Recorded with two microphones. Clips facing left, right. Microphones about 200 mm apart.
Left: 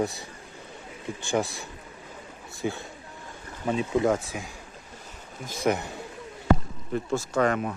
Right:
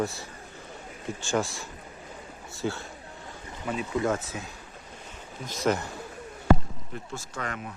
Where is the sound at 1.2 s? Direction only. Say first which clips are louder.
Left 1 dB; 60° left (ahead or behind).